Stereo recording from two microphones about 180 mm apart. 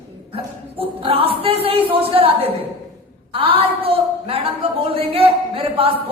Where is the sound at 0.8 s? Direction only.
30° right (ahead or behind).